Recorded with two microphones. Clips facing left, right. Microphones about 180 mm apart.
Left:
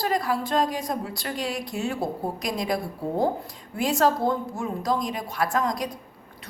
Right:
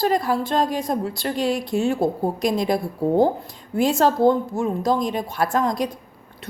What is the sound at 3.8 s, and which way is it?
A woman's voice, 25° right (ahead or behind).